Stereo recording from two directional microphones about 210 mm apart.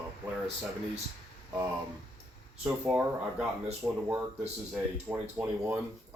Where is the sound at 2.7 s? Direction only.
5° right (ahead or behind).